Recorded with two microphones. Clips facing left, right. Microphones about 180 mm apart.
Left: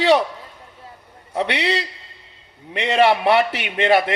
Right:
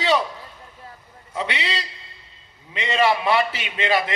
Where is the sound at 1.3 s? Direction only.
65° left (ahead or behind).